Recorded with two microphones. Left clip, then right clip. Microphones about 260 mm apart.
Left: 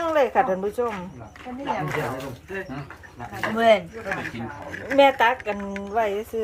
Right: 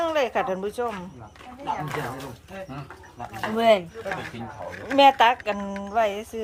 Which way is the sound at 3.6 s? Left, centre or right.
Right.